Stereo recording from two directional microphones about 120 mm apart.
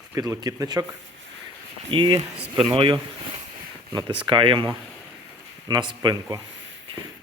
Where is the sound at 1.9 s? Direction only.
45° right (ahead or behind).